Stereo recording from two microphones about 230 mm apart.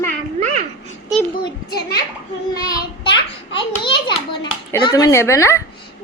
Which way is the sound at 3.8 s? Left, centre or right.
Centre.